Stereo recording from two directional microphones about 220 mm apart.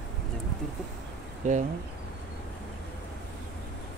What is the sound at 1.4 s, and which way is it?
Speech, 35° right (ahead or behind).